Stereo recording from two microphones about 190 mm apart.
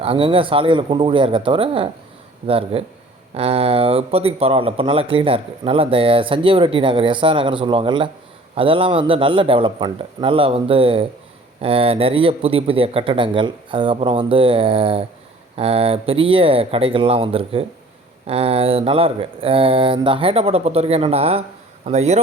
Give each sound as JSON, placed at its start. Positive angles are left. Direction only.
{"t": 0.0, "sound": "speech", "side_deg": -30}